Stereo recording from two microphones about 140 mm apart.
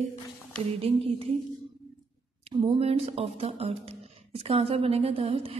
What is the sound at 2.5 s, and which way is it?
A woman's voice, 35° right (ahead or behind).